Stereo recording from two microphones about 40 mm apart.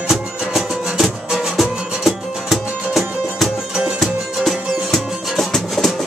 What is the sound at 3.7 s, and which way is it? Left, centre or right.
Music, right.